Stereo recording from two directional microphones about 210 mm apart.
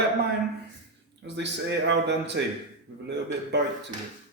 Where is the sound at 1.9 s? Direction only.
55° right (ahead or behind).